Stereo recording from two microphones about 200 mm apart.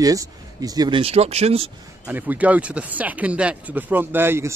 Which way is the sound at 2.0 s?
10° right (ahead or behind).